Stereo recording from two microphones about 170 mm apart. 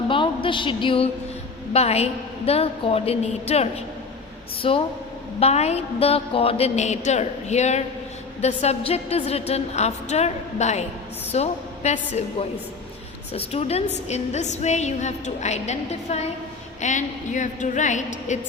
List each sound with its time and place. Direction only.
0.1 s a sound: 30° left (ahead or behind)
1.7 s a woman's voice: 40° left (ahead or behind)
13.5 s a woman's voice: 35° left (ahead or behind)